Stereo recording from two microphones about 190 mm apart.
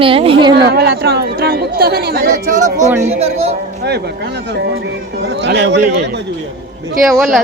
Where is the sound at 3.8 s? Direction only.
60° right (ahead or behind).